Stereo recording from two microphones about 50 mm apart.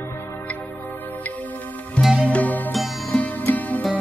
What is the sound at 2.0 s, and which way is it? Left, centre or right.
Music, left.